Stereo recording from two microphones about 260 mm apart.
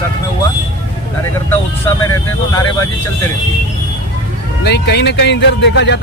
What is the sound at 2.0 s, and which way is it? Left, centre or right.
Speech, centre.